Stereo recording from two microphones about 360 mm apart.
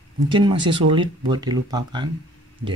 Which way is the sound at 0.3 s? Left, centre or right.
Centre.